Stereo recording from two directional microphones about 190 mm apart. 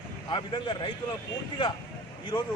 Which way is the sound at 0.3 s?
25° left (ahead or behind).